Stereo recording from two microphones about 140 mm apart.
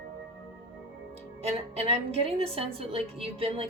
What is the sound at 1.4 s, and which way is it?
A woman's voice, 50° right (ahead or behind).